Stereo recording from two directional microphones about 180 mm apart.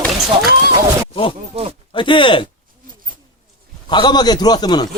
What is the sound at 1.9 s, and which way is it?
Speech, 25° left (ahead or behind).